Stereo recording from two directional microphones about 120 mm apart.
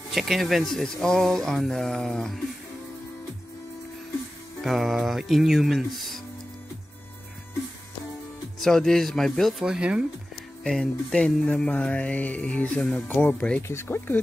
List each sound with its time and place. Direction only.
0.1 s speech: centre (ahead or behind)
4.6 s speech: centre (ahead or behind)
8.5 s speech: 5° left (ahead or behind)
10.6 s music: 5° left (ahead or behind)